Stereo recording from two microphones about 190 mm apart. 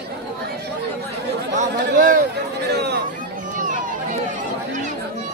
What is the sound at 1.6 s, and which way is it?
Chatter, 45° right (ahead or behind).